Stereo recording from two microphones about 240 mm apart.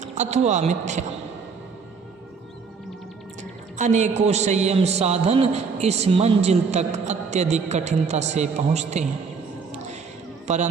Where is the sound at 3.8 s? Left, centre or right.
Right.